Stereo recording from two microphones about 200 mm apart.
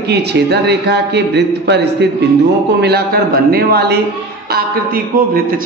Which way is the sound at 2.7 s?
55° right (ahead or behind).